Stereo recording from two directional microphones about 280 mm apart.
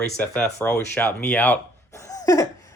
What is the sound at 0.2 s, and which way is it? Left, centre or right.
Speech, centre.